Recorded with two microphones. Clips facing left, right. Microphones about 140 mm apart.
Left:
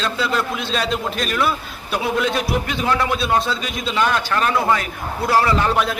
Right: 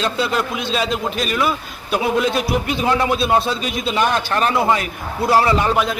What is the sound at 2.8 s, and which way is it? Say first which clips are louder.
A man's voice: right 3 dB; 20° right (ahead or behind).